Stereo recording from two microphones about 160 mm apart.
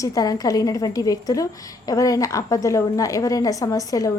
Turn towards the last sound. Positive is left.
turn(degrees=20)  # may be behind; listen again after turning